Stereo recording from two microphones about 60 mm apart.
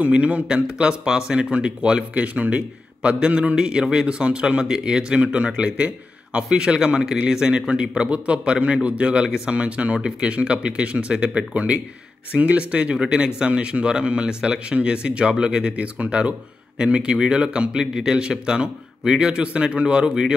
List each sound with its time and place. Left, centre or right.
0.0 s speech: right